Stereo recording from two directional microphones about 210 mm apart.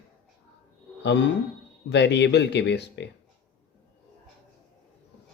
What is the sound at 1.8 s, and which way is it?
Speech, 55° left (ahead or behind).